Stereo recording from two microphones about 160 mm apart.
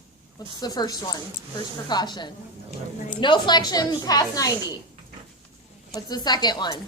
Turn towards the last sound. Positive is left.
turn(degrees=25)  # may be behind; listen again after turning